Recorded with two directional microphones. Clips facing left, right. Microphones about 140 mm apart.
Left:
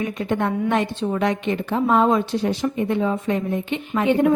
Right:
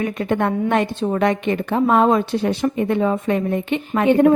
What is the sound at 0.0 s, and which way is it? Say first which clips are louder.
A woman's voice: right 3 dB; 55° right (ahead or behind).